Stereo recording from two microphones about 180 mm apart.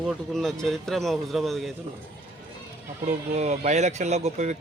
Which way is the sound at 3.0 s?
40° right (ahead or behind).